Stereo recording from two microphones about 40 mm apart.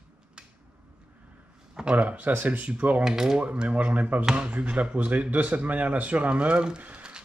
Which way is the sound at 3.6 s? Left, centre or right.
Right.